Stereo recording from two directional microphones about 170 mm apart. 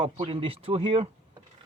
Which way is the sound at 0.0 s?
35° right (ahead or behind).